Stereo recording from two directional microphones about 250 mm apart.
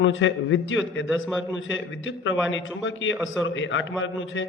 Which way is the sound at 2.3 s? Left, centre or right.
Left.